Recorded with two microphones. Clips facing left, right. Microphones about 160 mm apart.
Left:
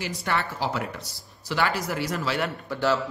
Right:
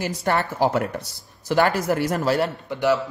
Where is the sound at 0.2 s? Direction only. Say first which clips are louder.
Right 7 dB; 45° right (ahead or behind).